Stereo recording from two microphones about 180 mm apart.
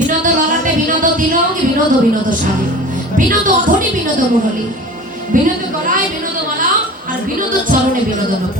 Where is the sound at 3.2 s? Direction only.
45° right (ahead or behind).